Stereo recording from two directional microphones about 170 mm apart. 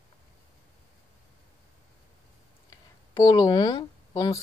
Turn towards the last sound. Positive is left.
turn(degrees=20)  # may be behind; listen again after turning